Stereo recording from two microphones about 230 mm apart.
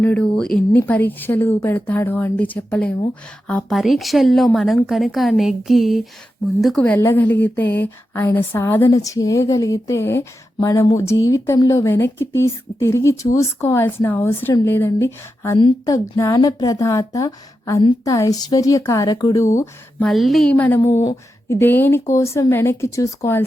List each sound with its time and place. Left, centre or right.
0.0 s a woman's voice: centre
19.5 s a woman's voice: centre